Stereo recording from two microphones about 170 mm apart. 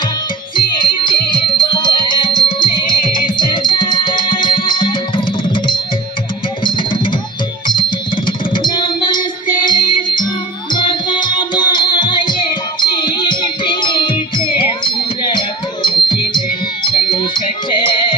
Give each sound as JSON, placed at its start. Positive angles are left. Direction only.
{"t": 0.5, "sound": "music", "side_deg": 30}
{"t": 8.6, "sound": "a sound", "side_deg": 25}
{"t": 9.6, "sound": "music", "side_deg": 25}